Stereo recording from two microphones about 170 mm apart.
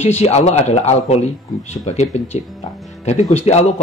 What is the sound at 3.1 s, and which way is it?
Speech, 40° left (ahead or behind).